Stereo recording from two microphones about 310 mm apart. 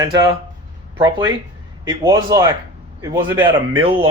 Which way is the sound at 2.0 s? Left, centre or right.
Centre.